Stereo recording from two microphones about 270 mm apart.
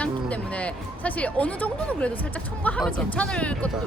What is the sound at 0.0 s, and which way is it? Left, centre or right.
Speech, centre.